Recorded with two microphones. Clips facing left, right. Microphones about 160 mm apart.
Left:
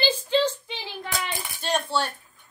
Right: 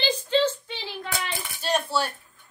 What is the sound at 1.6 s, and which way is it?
Speech, 5° right (ahead or behind).